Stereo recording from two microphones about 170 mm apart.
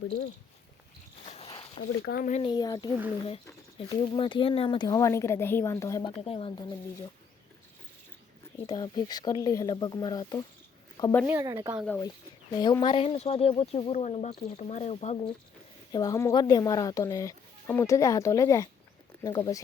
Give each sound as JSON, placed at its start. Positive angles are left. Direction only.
{"t": 1.2, "sound": "a sound", "side_deg": 40}
{"t": 1.8, "sound": "speech", "side_deg": 85}
{"t": 2.4, "sound": "speech", "side_deg": 25}
{"t": 6.2, "sound": "speech", "side_deg": 35}
{"t": 6.6, "sound": "speech", "side_deg": 20}
{"t": 8.6, "sound": "speech", "side_deg": 25}
{"t": 11.3, "sound": "speech", "side_deg": -15}
{"t": 11.9, "sound": "speech", "side_deg": 20}
{"t": 15.9, "sound": "speech", "side_deg": 25}